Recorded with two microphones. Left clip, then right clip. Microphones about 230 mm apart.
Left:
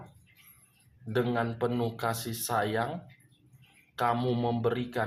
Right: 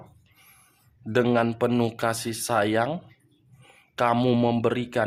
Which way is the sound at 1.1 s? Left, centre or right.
Right.